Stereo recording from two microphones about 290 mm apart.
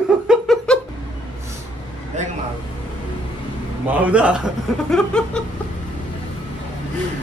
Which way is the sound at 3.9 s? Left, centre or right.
Centre.